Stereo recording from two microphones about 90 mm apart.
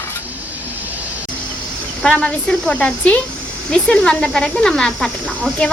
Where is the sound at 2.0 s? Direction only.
10° left (ahead or behind).